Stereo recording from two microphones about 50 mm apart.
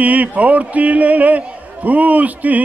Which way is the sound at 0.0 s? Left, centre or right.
Right.